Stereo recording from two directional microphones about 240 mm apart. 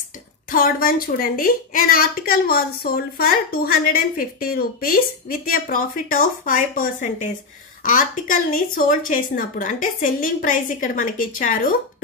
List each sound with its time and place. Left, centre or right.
0.5 s a woman's voice: left